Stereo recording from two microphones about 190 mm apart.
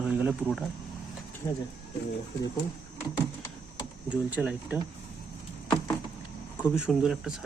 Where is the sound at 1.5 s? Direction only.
20° left (ahead or behind).